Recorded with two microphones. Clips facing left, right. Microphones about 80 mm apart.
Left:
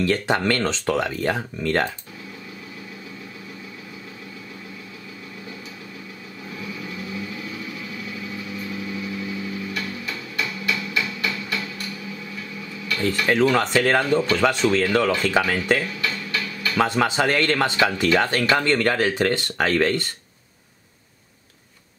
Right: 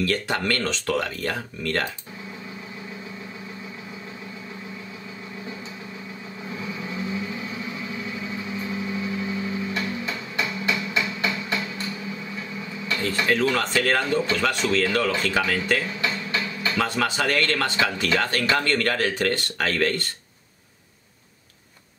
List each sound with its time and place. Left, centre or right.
0.0 s speech: left
6.6 s vehicle: right
13.3 s speech: left
15.9 s a sound: right
16.7 s speech: left